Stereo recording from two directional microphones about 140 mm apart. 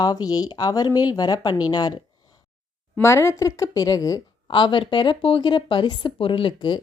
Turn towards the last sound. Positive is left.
turn(degrees=35)  # may be behind; listen again after turning